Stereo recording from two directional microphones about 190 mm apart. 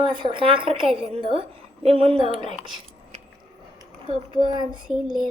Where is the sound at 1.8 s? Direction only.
30° right (ahead or behind).